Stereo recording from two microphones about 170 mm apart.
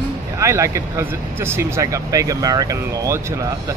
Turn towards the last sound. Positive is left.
turn(degrees=-20)  # may be behind; listen again after turning